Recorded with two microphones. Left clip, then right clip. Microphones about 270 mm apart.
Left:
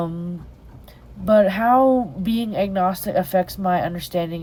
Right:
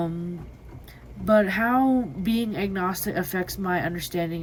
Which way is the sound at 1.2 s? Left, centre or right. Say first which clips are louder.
Left 5 dB; centre.